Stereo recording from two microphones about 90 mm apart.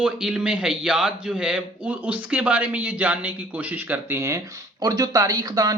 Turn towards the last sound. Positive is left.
turn(degrees=-45)  # may be behind; listen again after turning